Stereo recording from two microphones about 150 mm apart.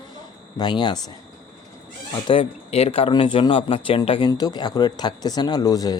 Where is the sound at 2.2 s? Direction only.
35° left (ahead or behind).